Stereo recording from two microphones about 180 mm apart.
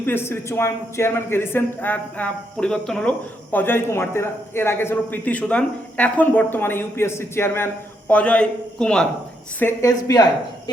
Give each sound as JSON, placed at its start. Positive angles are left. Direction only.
{"t": 0.0, "sound": "a man's voice", "side_deg": 10}
{"t": 9.6, "sound": "a man's voice", "side_deg": 15}